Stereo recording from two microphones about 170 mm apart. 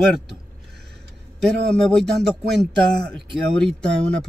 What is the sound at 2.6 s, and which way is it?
Speech, 75° right (ahead or behind).